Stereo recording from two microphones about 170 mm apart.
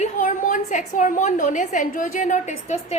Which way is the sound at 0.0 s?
50° left (ahead or behind).